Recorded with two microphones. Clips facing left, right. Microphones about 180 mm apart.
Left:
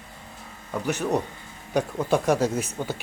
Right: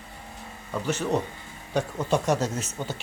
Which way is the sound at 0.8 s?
15° left (ahead or behind).